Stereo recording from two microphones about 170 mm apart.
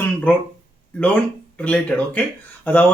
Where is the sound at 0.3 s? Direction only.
10° left (ahead or behind).